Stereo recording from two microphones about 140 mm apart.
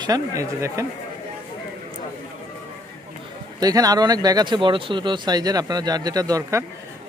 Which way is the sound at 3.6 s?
25° right (ahead or behind).